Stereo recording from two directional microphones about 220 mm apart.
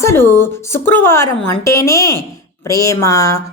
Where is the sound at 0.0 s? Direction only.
10° left (ahead or behind).